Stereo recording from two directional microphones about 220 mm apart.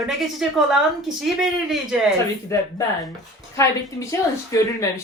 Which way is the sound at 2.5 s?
15° left (ahead or behind).